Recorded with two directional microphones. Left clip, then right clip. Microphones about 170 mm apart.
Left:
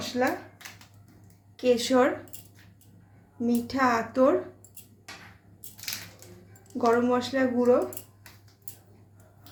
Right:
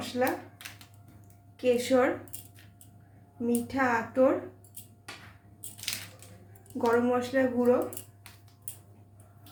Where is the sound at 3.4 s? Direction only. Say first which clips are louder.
Left 3 dB; 65° left (ahead or behind).